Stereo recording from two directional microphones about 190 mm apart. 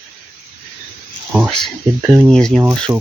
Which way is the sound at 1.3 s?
Centre (ahead or behind).